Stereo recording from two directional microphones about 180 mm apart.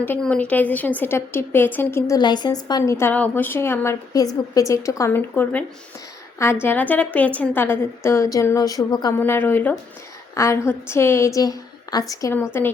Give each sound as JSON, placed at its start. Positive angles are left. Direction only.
{"t": 0.0, "sound": "a woman's voice", "side_deg": 10}